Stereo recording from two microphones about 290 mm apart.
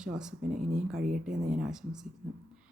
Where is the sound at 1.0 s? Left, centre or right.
Right.